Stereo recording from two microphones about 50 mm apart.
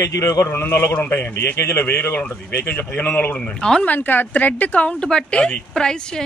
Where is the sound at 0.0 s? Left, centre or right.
Left.